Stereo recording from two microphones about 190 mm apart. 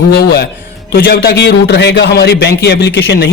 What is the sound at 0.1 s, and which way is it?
A man's voice, 60° left (ahead or behind).